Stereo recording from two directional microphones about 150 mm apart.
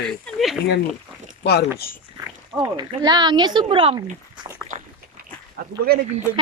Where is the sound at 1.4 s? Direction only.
90° left.